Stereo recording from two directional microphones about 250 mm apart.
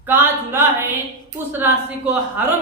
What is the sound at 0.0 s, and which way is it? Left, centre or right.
A woman's voice, centre.